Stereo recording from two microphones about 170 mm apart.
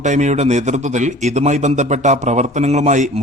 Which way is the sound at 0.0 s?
45° right (ahead or behind).